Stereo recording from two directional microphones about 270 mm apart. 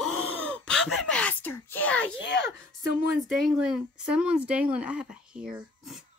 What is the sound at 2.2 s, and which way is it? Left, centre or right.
Speech, left.